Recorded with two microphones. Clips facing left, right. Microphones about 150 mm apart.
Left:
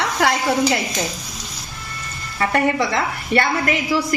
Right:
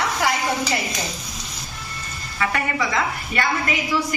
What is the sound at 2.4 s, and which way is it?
Speech, 40° left (ahead or behind).